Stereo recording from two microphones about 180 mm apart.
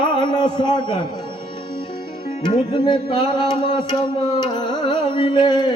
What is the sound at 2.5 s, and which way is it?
A man's voice, 25° left (ahead or behind).